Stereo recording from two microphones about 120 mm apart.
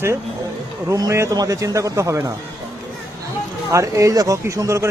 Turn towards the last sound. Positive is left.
turn(degrees=-25)  # may be behind; listen again after turning